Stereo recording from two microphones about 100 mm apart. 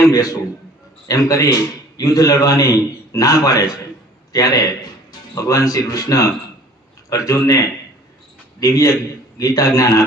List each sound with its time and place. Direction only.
0.0 s a man's voice: 35° left (ahead or behind)